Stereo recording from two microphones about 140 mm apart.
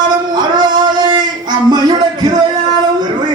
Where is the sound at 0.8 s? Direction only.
30° right (ahead or behind).